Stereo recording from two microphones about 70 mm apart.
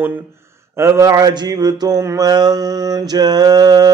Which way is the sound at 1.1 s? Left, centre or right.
Right.